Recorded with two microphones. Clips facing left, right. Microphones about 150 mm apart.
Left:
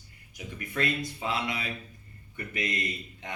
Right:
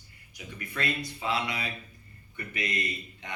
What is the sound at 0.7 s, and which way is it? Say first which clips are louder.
Speech: left 3 dB; 40° left (ahead or behind).